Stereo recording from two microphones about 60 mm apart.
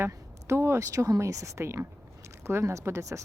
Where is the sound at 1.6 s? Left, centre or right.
Right.